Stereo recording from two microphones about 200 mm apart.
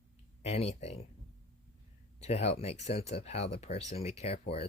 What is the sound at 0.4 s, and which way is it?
Speech, 30° left (ahead or behind).